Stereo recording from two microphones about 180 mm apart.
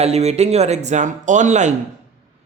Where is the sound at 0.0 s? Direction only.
35° right (ahead or behind).